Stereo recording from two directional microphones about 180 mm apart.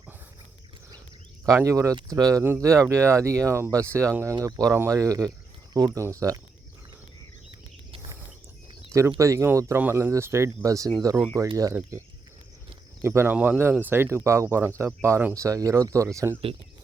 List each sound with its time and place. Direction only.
1.5 s speech: 15° right (ahead or behind)
8.9 s speech: 15° right (ahead or behind)